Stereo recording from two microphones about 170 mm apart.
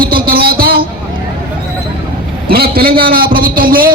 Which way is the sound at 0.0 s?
60° right (ahead or behind).